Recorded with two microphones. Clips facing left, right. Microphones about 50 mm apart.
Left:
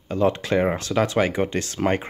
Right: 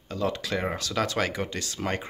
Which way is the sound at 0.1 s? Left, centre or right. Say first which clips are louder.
Left 8 dB; left.